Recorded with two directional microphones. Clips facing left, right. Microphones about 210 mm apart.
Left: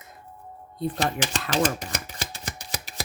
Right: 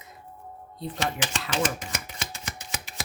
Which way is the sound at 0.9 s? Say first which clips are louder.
Even; 35° left (ahead or behind).